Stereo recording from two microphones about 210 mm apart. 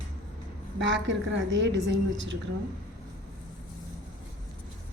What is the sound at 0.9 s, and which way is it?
A woman's voice, 60° right (ahead or behind).